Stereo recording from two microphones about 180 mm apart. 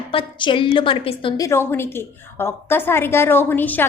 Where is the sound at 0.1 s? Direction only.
30° left (ahead or behind).